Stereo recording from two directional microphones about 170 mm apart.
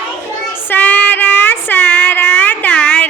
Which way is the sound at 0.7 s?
10° left (ahead or behind).